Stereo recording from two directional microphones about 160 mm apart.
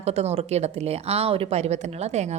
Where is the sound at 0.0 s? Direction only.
40° right (ahead or behind).